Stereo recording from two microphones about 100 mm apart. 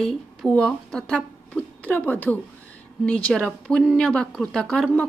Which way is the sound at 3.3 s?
Centre (ahead or behind).